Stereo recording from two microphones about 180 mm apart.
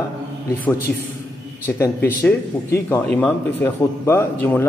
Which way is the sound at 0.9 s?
5° left (ahead or behind).